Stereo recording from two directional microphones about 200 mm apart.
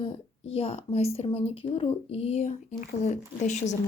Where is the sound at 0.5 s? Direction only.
30° left (ahead or behind).